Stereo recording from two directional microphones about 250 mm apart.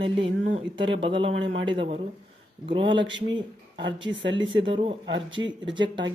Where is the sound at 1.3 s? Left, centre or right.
Right.